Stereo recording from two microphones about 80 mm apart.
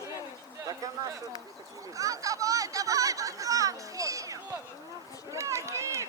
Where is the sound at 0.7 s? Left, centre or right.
Right.